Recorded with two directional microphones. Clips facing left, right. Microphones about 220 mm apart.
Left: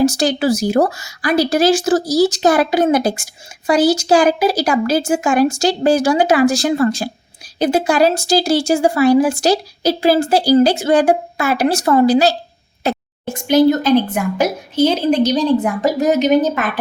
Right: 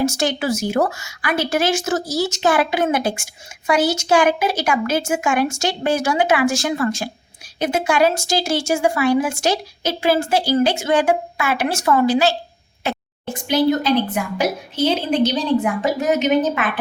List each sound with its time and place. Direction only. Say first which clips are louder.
0.0 s speech: left 5 dB; 35° left (ahead or behind)